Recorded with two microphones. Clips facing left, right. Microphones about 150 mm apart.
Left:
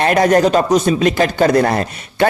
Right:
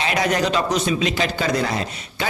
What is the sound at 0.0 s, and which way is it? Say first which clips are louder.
Speech: left 9 dB; 50° left (ahead or behind).